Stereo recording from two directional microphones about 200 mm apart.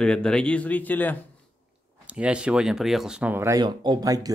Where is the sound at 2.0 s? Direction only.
5° right (ahead or behind).